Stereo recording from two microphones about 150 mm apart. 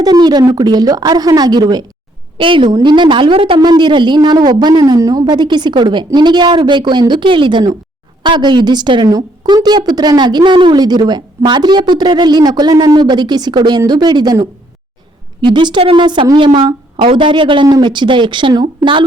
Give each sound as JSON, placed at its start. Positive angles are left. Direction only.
{"t": 0.0, "sound": "a woman's voice", "side_deg": -25}